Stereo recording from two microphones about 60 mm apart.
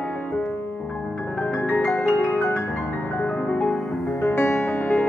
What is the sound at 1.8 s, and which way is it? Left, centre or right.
Music, left.